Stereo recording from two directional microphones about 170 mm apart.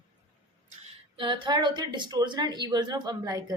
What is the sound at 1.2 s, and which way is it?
A woman's voice, 25° right (ahead or behind).